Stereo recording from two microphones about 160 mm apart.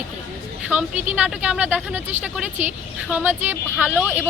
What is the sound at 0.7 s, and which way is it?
Speech, 5° right (ahead or behind).